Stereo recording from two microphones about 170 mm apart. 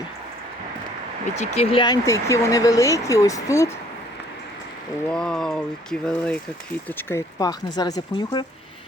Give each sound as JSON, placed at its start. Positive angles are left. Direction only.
{"t": 1.4, "sound": "speech", "side_deg": 35}
{"t": 5.1, "sound": "speech", "side_deg": 5}